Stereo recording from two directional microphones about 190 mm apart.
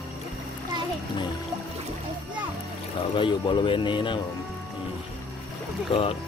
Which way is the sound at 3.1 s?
25° left (ahead or behind).